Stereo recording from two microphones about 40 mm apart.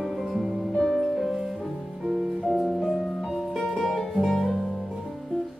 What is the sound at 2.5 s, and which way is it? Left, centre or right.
Music, centre.